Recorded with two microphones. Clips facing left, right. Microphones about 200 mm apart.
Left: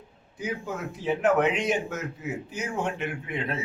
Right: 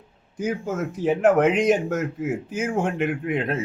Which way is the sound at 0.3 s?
45° right (ahead or behind).